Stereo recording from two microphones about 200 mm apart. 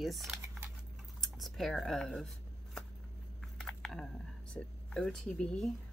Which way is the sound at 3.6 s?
5° left (ahead or behind).